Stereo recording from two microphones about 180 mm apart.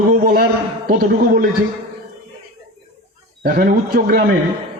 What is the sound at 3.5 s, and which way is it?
Speech, 55° right (ahead or behind).